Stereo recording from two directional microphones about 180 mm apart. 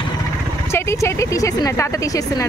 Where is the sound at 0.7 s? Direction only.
15° left (ahead or behind).